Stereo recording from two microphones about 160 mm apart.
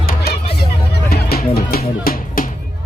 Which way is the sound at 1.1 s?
70° left (ahead or behind).